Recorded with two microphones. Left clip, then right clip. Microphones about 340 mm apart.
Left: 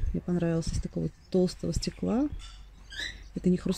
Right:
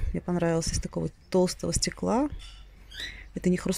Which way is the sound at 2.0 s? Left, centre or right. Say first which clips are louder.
Right 4 dB; right.